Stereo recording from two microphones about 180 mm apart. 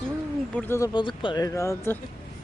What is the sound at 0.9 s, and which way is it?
Speech, 25° left (ahead or behind).